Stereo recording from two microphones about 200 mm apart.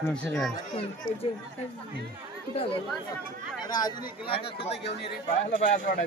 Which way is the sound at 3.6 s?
20° left (ahead or behind).